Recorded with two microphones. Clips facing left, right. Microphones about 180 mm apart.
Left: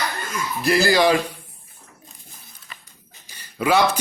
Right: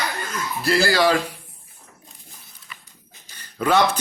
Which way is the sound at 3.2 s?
10° left (ahead or behind).